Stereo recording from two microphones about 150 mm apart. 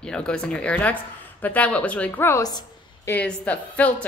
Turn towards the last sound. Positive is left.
turn(degrees=10)  # may be behind; listen again after turning